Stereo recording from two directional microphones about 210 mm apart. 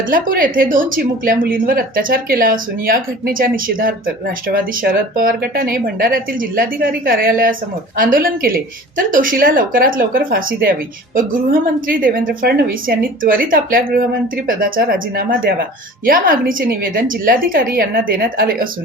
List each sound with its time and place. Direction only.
0.1 s a woman's voice: 40° right (ahead or behind)